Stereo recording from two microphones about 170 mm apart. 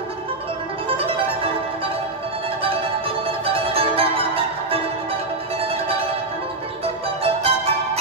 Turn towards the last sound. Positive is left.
turn(degrees=-35)  # may be behind; listen again after turning